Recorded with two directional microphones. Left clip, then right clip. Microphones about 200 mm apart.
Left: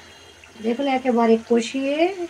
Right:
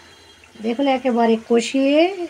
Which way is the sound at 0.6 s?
40° right (ahead or behind).